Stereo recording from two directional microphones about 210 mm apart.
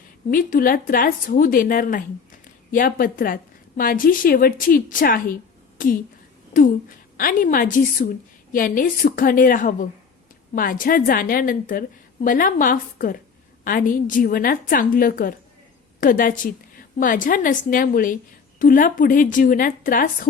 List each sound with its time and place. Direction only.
0.3 s a woman's voice: 40° left (ahead or behind)
6.5 s a woman's voice: 40° left (ahead or behind)